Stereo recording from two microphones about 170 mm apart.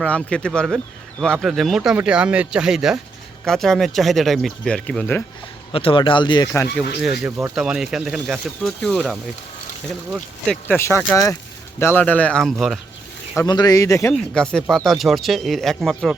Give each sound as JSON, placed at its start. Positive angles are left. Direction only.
{"t": 0.0, "sound": "speech", "side_deg": 5}
{"t": 5.7, "sound": "speech", "side_deg": 30}
{"t": 6.5, "sound": "speech", "side_deg": 10}
{"t": 7.2, "sound": "speech", "side_deg": -15}
{"t": 10.8, "sound": "speech", "side_deg": 15}
{"t": 13.5, "sound": "speech", "side_deg": 25}
{"t": 14.1, "sound": "speech", "side_deg": 5}